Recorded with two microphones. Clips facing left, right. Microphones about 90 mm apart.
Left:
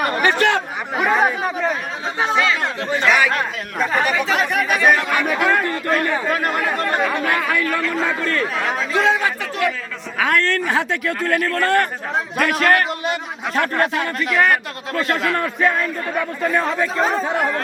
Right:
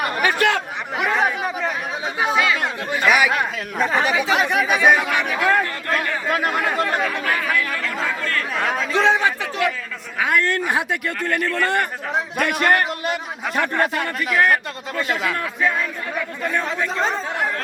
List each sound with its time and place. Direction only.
0.0 s chatter: 5° right (ahead or behind)
2.2 s speech: 10° right (ahead or behind)
8.2 s speech: 20° left (ahead or behind)
8.5 s speech: centre (ahead or behind)
9.0 s a man's voice: 25° right (ahead or behind)
10.2 s speech: 15° right (ahead or behind)
16.6 s speech: 5° left (ahead or behind)